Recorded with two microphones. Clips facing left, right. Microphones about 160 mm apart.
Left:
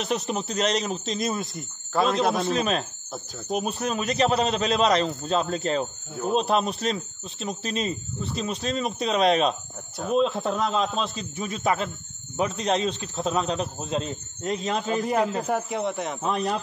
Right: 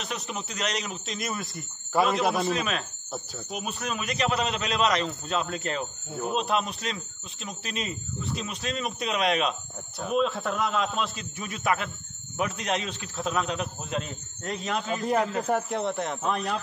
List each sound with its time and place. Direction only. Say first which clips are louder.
0.0 s a man's voice: left 7 dB; 35° left (ahead or behind)
1.9 s speech: left 1 dB; 10° right (ahead or behind)
2.5 s a man's voice: left 4 dB; 35° left (ahead or behind)
15.0 s a man's voice: right 2 dB; 10° left (ahead or behind)
16.2 s a man's voice: left 3 dB; 35° left (ahead or behind)